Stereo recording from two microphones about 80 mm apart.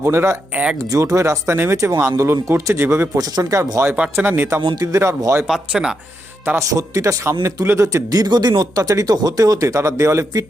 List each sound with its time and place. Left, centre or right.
0.0 s speech: right
0.5 s speech: centre
0.8 s speech: right
4.2 s speech: right
4.7 s speech: right
4.9 s speech: right
5.5 s speech: centre
6.6 s speech: right
8.1 s speech: right